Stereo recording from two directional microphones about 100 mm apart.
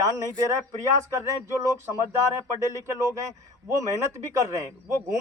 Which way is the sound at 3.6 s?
35° right (ahead or behind).